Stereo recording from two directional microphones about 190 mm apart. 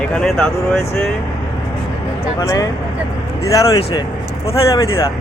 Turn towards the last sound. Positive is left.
turn(degrees=15)  # may be behind; listen again after turning